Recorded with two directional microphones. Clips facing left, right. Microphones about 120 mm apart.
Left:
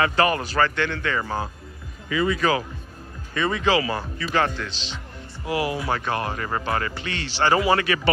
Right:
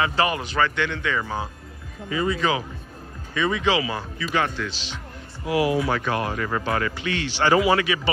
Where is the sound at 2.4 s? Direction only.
20° right (ahead or behind).